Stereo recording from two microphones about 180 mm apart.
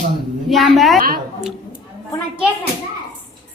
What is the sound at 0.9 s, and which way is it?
Speech, 50° right (ahead or behind).